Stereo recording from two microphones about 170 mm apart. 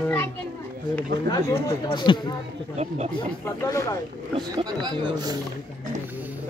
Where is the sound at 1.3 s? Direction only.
20° left (ahead or behind).